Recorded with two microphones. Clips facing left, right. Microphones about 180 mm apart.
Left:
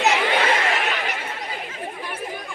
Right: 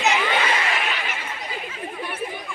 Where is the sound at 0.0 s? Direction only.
45° left (ahead or behind).